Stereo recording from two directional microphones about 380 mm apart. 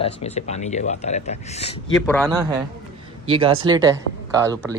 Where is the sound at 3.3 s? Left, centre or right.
Centre.